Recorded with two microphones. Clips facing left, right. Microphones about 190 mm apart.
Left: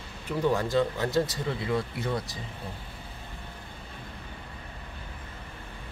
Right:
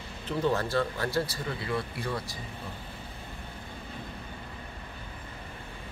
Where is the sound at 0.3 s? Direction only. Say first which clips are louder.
Left 2 dB; 15° left (ahead or behind).